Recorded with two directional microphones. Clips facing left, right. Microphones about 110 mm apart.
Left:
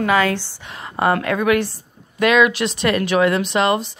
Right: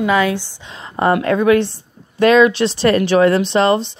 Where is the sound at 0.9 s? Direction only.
25° right (ahead or behind).